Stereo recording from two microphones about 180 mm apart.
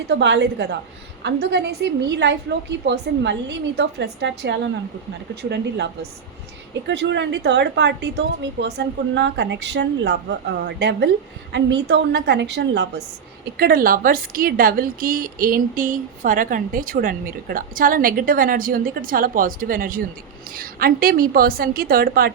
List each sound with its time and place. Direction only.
0.1 s a woman's voice: 75° right (ahead or behind)
5.3 s a woman's voice: 65° right (ahead or behind)